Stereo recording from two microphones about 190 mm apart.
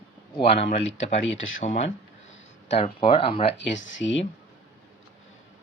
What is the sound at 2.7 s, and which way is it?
Speech, 30° left (ahead or behind).